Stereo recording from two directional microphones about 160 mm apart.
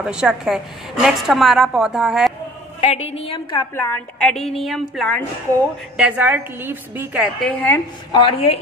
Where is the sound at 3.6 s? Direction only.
15° left (ahead or behind).